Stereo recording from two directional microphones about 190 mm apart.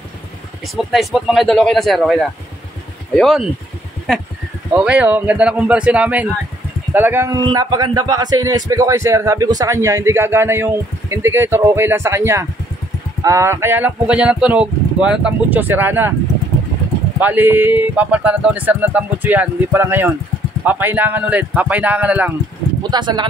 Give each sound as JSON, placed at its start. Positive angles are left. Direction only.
{"t": 0.7, "sound": "speech", "side_deg": 0}
{"t": 17.2, "sound": "speech", "side_deg": -10}
{"t": 22.8, "sound": "speech", "side_deg": -25}